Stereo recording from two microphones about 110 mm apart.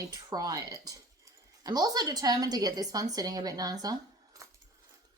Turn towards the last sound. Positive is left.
turn(degrees=-35)  # may be behind; listen again after turning